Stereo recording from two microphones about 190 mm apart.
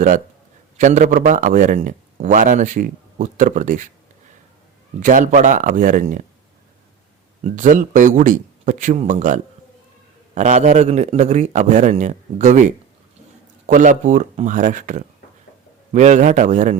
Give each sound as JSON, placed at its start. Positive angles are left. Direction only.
{"t": 0.8, "sound": "a man's voice", "side_deg": -40}
{"t": 4.9, "sound": "a man's voice", "side_deg": -40}
{"t": 7.4, "sound": "a man's voice", "side_deg": -40}